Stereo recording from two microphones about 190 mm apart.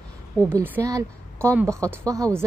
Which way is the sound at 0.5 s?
10° right (ahead or behind).